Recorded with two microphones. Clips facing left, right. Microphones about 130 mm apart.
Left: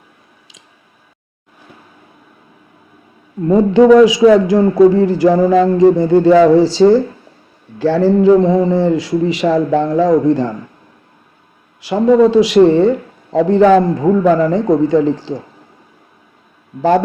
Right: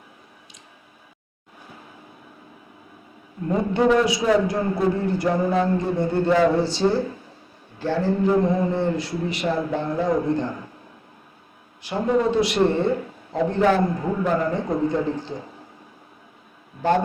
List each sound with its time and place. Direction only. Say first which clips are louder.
3.5 s a man's voice: left 11 dB; 90° left
11.8 s a man's voice: left 11 dB; 90° left